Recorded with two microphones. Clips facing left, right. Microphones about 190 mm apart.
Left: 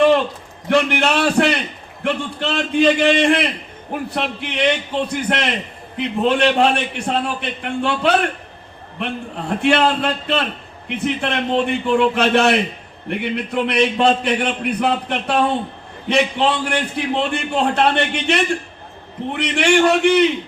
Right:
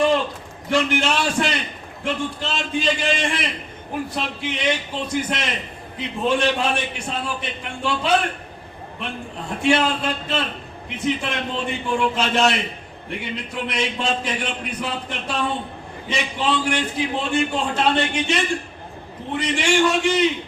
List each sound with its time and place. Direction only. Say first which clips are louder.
0.7 s a man's voice: left 4 dB; 60° left (ahead or behind)
9.6 s a man's voice: left 3 dB; 60° left (ahead or behind)